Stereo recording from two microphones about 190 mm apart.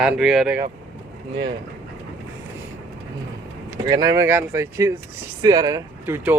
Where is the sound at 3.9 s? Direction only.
20° right (ahead or behind).